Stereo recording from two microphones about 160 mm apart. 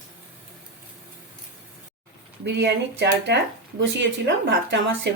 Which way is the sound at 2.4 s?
90° right.